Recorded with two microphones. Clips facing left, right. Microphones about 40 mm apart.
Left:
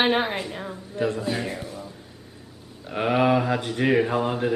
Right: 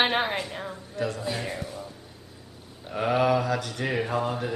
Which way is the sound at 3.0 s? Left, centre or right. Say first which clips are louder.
Left 2 dB; left.